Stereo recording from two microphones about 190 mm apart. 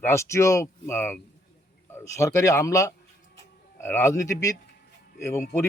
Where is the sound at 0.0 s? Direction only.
15° left (ahead or behind).